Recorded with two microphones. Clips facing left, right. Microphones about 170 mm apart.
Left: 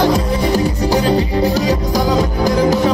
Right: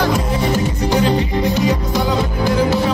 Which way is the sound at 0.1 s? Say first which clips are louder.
Left 2 dB; 35° left (ahead or behind).